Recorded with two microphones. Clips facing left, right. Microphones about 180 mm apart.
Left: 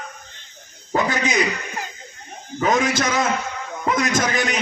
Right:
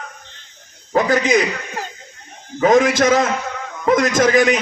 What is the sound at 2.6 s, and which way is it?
A man's voice, 50° right (ahead or behind).